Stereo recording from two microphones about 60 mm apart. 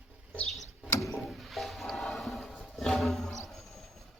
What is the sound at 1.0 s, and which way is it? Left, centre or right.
Music, centre.